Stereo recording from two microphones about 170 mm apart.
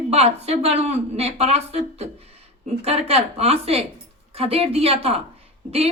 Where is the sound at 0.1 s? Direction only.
35° right (ahead or behind).